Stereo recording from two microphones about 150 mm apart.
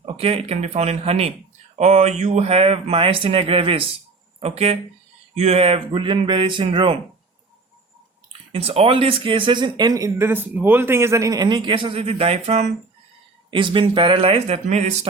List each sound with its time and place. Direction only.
0.0 s speech: 40° right (ahead or behind)
8.3 s speech: 40° right (ahead or behind)
13.5 s speech: 35° right (ahead or behind)